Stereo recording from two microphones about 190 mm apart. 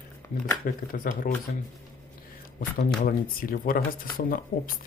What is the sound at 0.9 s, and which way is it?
Speech, 50° left (ahead or behind).